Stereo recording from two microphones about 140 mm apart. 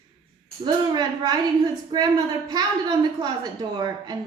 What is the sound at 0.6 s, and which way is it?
A woman's voice, 30° right (ahead or behind).